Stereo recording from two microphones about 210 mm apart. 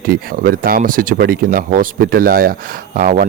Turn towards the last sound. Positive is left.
turn(degrees=-40)  # may be behind; listen again after turning